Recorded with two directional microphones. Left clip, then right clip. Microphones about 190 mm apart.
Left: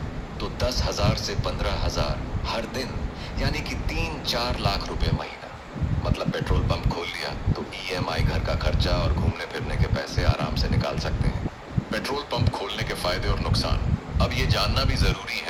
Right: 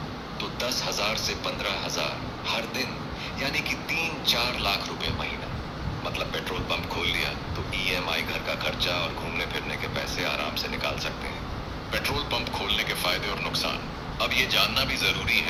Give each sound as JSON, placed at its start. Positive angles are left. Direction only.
{"t": 0.6, "sound": "speech", "side_deg": 40}
{"t": 6.1, "sound": "speech", "side_deg": 40}